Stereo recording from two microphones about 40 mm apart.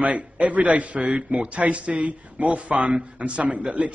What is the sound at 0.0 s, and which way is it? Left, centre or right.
A man's voice, right.